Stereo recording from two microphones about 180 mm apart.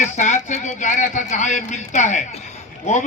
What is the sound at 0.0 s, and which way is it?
A man's voice, 40° left (ahead or behind).